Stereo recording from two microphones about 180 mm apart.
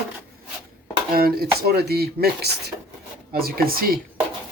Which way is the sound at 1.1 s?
55° right (ahead or behind).